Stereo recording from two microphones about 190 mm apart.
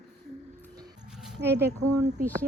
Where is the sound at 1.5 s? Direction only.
60° right (ahead or behind).